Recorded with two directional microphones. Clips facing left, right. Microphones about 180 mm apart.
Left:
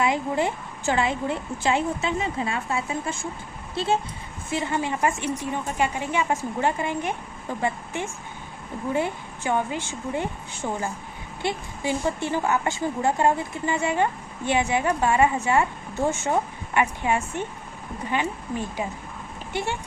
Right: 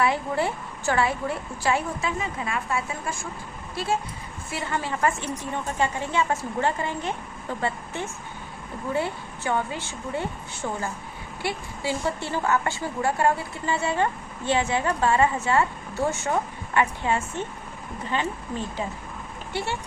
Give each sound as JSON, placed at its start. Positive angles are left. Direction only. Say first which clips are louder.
{"t": 0.0, "sound": "a woman's voice", "louder": "left 1 dB", "side_deg": 20}
{"t": 4.5, "sound": "speech", "louder": "left 3 dB", "side_deg": 20}
{"t": 8.9, "sound": "speech", "louder": "left 1 dB", "side_deg": 15}